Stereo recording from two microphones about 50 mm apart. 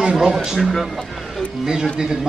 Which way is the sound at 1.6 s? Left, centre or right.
Centre.